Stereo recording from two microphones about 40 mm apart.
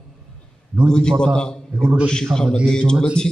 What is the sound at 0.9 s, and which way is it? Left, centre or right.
A man's voice, centre.